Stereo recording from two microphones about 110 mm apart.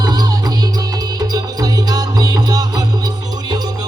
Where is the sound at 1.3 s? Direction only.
35° right (ahead or behind).